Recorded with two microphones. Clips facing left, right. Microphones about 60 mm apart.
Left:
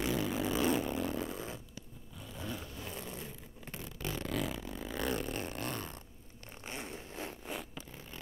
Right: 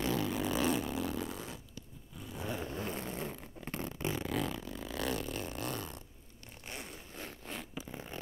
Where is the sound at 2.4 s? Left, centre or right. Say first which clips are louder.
Right 5 dB; right.